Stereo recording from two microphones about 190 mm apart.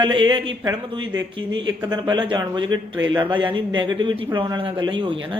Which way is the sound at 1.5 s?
75° right (ahead or behind).